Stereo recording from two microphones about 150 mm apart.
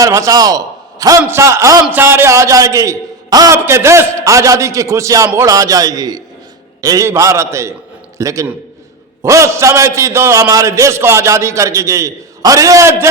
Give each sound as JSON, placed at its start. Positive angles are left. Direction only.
{"t": 0.0, "sound": "a man's voice", "side_deg": -20}